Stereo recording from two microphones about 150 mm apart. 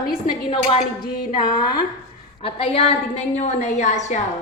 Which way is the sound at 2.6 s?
40° left (ahead or behind).